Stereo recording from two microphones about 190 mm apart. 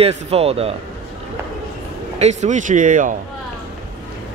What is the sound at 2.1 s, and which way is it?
Speech, 35° right (ahead or behind).